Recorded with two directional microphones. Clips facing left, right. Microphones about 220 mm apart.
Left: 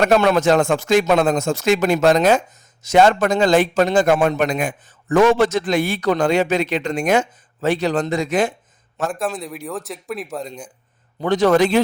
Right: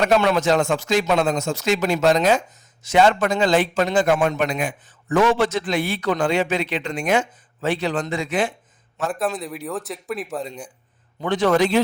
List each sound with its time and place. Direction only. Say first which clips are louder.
0.0 s a man's voice: left 3 dB; 50° left (ahead or behind)
9.1 s speech: even; centre (ahead or behind)
11.2 s a man's voice: left 3 dB; 40° left (ahead or behind)